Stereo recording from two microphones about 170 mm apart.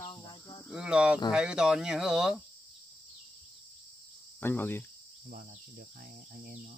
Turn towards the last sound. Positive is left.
turn(degrees=-55)  # may be behind; listen again after turning